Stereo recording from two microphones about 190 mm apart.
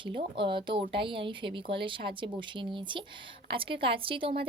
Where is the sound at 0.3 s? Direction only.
25° right (ahead or behind).